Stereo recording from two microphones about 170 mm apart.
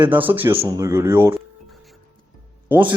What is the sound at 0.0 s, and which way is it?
A man's voice, 10° right (ahead or behind).